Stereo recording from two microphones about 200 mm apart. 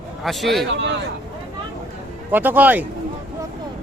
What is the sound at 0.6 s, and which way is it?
Speech, 60° right (ahead or behind).